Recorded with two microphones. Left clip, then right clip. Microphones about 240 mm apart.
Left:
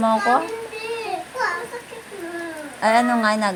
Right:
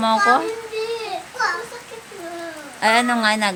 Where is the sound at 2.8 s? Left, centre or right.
Right.